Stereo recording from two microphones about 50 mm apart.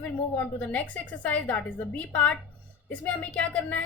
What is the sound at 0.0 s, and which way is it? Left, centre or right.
A woman's voice, left.